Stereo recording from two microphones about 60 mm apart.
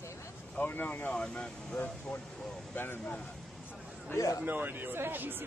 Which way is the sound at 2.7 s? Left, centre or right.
Left.